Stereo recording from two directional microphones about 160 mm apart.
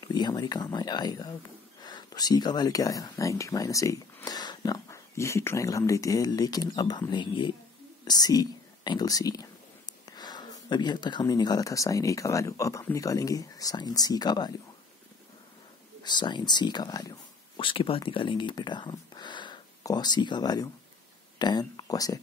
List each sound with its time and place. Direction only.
0.1 s speech: 25° left (ahead or behind)
16.0 s speech: 30° left (ahead or behind)